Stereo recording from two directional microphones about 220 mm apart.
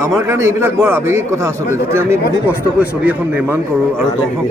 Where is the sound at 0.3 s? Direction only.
10° right (ahead or behind).